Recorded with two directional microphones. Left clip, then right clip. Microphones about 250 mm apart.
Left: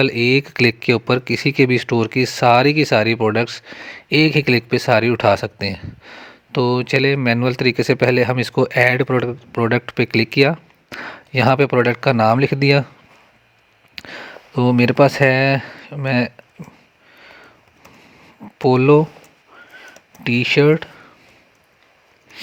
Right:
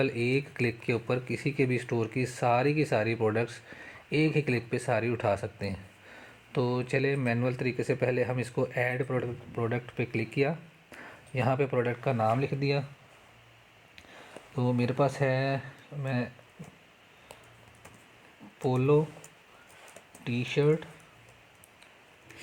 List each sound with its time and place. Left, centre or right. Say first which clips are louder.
0.0 s speech: left 13 dB; left
13.9 s speech: left 16 dB; left
18.6 s speech: left 13 dB; left
20.2 s speech: left 14 dB; left